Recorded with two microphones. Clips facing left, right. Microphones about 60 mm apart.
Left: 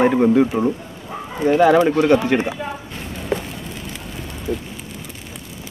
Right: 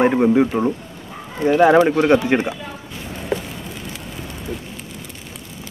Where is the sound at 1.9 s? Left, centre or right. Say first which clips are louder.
Even; right.